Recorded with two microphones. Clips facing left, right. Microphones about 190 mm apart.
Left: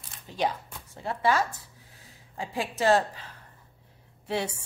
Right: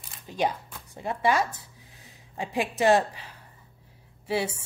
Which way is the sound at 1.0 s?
15° right (ahead or behind).